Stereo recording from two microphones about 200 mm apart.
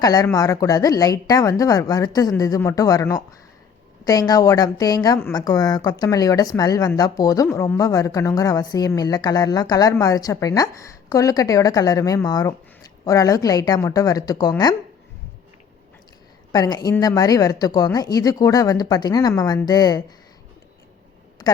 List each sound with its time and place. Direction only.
0.0 s a woman's voice: 15° left (ahead or behind)
16.5 s a woman's voice: 20° left (ahead or behind)
21.4 s a sound: 20° left (ahead or behind)